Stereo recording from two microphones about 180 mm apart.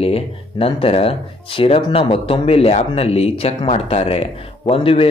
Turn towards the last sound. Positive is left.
turn(degrees=30)  # may be behind; listen again after turning